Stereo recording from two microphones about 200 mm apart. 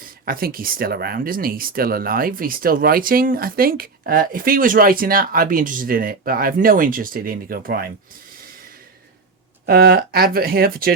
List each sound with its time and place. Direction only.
0.3 s speech: 45° right (ahead or behind)
9.6 s speech: 50° right (ahead or behind)